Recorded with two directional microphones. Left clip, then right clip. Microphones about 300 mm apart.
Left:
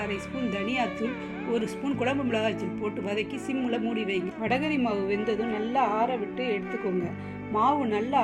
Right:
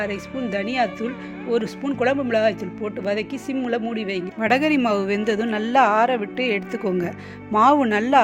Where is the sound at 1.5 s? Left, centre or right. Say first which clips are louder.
Right 7 dB; right.